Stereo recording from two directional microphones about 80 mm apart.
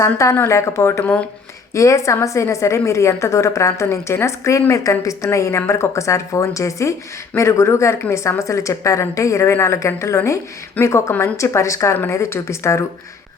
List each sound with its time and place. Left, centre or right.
0.0 s a woman's voice: left